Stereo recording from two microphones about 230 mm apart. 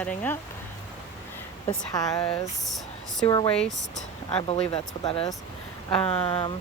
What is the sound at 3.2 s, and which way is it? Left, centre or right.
Speech, centre.